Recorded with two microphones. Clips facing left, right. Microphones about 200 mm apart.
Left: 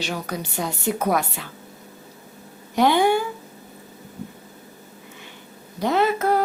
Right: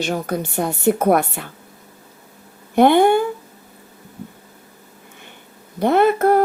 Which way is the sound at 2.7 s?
55° right (ahead or behind).